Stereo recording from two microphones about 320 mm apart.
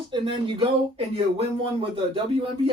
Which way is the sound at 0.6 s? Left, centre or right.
Centre.